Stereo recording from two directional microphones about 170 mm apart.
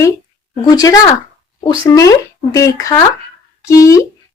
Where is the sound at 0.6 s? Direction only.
20° left (ahead or behind).